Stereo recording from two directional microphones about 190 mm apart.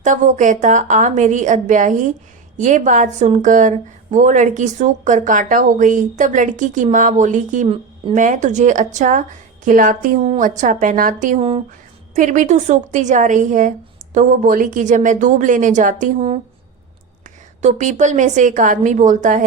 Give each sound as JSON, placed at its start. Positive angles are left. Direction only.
{"t": 0.0, "sound": "a woman's voice", "side_deg": -40}
{"t": 17.6, "sound": "speech", "side_deg": -40}